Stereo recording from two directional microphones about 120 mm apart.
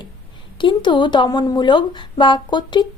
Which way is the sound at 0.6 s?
40° left (ahead or behind).